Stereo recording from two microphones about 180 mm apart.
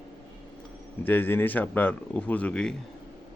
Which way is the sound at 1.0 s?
10° left (ahead or behind).